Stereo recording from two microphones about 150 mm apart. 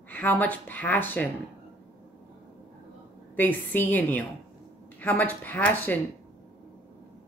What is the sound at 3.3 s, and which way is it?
Speech, 10° left (ahead or behind).